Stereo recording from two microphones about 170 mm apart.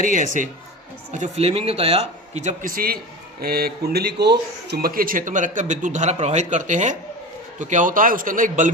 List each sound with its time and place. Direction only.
0.0 s speech: 50° right (ahead or behind)